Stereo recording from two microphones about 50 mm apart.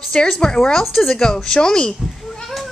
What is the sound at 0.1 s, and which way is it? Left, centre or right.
Speech, centre.